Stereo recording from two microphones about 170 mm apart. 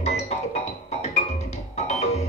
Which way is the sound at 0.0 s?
40° left (ahead or behind).